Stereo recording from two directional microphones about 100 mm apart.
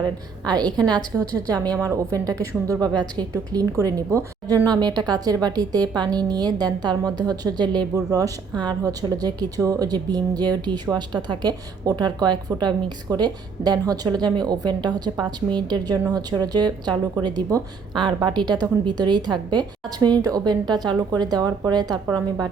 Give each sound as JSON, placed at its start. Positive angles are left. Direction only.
{"t": 0.4, "sound": "a woman's voice", "side_deg": -40}